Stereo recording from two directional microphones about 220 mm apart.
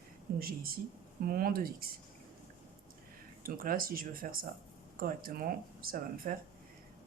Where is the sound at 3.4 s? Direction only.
40° right (ahead or behind).